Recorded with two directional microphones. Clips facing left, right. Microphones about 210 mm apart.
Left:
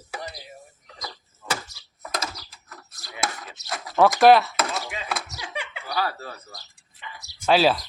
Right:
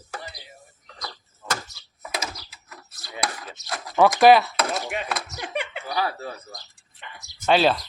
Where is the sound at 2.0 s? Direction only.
10° right (ahead or behind).